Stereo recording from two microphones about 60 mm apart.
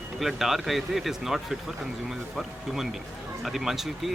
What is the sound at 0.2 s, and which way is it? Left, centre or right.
Speech, centre.